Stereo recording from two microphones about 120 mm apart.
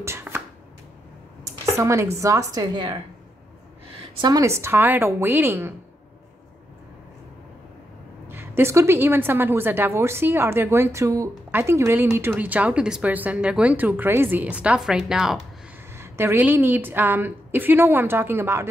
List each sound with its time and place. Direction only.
0.0 s chopping: 20° right (ahead or behind)
1.8 s a woman's voice: 25° right (ahead or behind)
4.2 s speech: 30° right (ahead or behind)
8.3 s a woman's voice: 20° right (ahead or behind); by 15.4 s 5° right (ahead or behind)
16.0 s speech: 20° right (ahead or behind)